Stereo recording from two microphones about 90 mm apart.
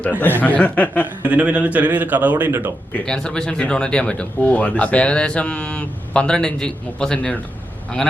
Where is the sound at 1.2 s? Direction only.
15° right (ahead or behind).